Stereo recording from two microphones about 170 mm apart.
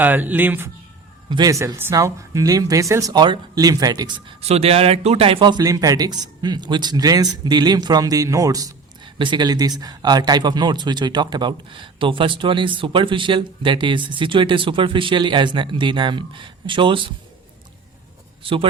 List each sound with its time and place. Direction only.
0.0 s speech: 10° right (ahead or behind)
1.3 s speech: 20° right (ahead or behind)